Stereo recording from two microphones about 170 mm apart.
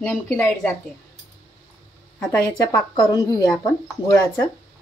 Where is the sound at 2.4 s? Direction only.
20° left (ahead or behind).